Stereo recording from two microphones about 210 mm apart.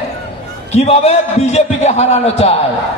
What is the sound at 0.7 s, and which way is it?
A man's voice, 30° left (ahead or behind).